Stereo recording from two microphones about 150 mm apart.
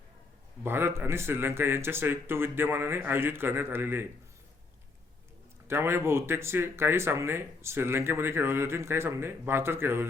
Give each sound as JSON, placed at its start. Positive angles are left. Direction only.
{"t": 0.6, "sound": "speech", "side_deg": -15}
{"t": 5.6, "sound": "speech", "side_deg": -15}